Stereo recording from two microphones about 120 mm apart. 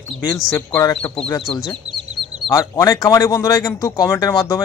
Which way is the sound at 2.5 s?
25° left (ahead or behind).